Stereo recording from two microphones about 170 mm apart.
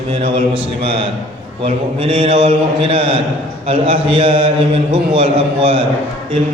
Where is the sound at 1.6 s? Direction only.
30° right (ahead or behind).